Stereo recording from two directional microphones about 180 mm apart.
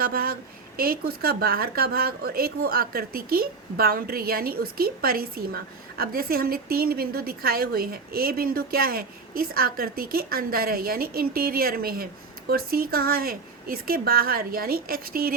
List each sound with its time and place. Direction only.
0.0 s a woman's voice: 55° right (ahead or behind)